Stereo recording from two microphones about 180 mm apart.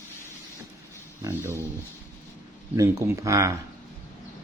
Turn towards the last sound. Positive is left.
turn(degrees=-15)  # may be behind; listen again after turning